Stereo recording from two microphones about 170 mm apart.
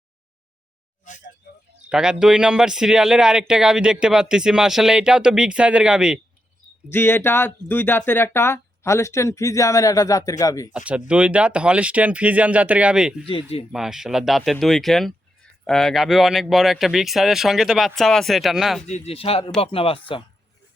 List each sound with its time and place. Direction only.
1.9 s speech: 5° right (ahead or behind)
6.9 s speech: 15° left (ahead or behind)
10.7 s speech: 5° right (ahead or behind)
13.2 s speech: 35° left (ahead or behind)
13.7 s speech: 5° right (ahead or behind)
18.9 s speech: 40° left (ahead or behind)